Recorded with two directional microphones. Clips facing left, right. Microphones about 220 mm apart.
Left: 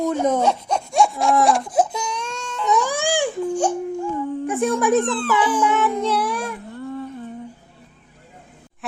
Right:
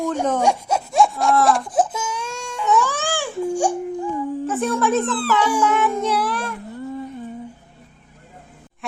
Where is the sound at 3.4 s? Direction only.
10° right (ahead or behind).